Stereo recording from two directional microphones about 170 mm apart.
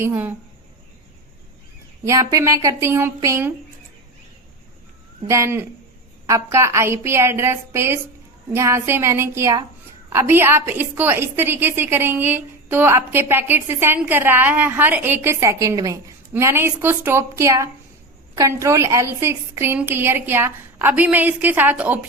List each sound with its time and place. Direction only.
0.0 s a woman's voice: 10° right (ahead or behind)
2.0 s a woman's voice: 20° right (ahead or behind)
5.3 s a woman's voice: 15° right (ahead or behind)